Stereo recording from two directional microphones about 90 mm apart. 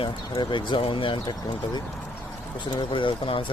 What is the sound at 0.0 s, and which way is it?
Speech, 70° left (ahead or behind).